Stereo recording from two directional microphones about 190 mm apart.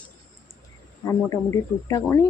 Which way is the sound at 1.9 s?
15° left (ahead or behind).